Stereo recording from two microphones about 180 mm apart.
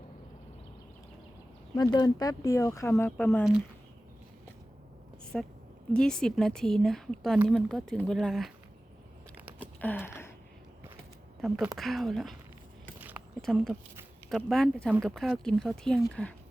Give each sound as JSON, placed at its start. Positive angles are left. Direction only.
{"t": 1.7, "sound": "speech", "side_deg": 20}
{"t": 5.3, "sound": "speech", "side_deg": 0}
{"t": 9.5, "sound": "typing", "side_deg": -10}
{"t": 9.8, "sound": "a sound", "side_deg": 10}
{"t": 11.3, "sound": "speech", "side_deg": 0}
{"t": 13.4, "sound": "speech", "side_deg": 0}